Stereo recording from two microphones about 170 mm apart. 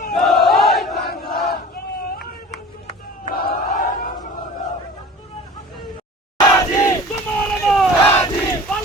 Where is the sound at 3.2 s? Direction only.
60° left (ahead or behind).